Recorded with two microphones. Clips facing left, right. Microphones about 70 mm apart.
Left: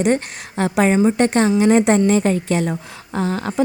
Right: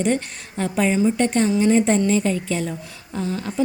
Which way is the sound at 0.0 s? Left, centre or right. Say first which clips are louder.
Left 4 dB; left.